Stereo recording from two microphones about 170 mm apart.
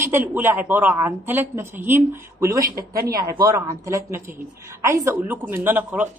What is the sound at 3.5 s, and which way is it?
Speech, 15° right (ahead or behind).